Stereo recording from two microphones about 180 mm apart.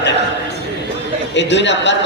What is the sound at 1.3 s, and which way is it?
Speech, 75° left (ahead or behind).